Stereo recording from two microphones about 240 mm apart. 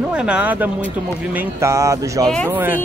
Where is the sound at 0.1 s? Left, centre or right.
Centre.